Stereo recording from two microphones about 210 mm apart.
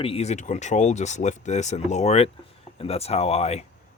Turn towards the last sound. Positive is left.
turn(degrees=30)  # may be behind; listen again after turning